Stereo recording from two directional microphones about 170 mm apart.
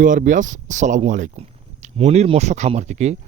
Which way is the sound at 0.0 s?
50° right (ahead or behind).